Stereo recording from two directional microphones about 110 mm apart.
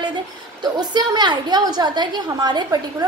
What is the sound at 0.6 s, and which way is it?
A woman's voice, 40° right (ahead or behind).